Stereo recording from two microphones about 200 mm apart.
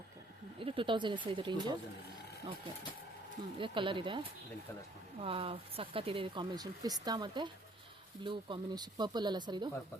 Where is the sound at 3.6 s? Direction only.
25° right (ahead or behind).